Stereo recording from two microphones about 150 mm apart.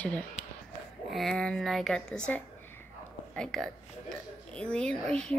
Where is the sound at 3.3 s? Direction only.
5° left (ahead or behind).